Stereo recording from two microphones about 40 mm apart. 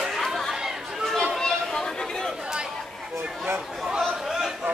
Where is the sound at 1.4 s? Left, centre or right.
Centre.